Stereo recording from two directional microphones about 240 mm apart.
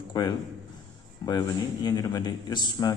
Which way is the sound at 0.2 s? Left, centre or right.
Centre.